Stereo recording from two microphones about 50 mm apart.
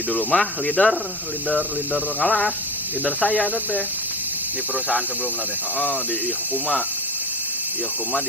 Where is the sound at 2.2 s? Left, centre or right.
Centre.